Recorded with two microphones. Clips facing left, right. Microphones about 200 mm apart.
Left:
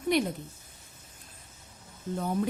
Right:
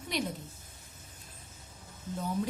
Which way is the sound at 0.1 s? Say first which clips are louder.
Left 6 dB; 55° left (ahead or behind).